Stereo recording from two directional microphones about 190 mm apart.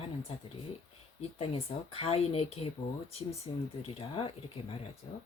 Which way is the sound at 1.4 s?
30° left (ahead or behind).